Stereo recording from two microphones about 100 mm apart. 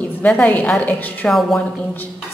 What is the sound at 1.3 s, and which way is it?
Speech, centre (ahead or behind).